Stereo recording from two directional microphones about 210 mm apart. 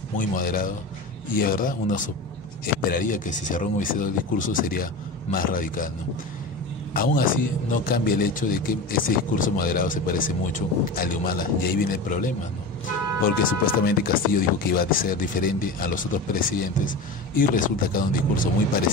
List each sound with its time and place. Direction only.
0.3 s a man's voice: 40° left (ahead or behind)
7.0 s a man's voice: 40° left (ahead or behind)